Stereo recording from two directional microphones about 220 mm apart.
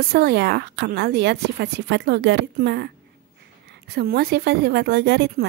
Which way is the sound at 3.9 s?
45° right (ahead or behind).